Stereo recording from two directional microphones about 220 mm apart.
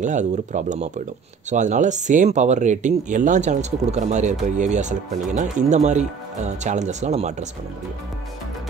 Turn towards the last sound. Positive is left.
turn(degrees=-30)  # may be behind; listen again after turning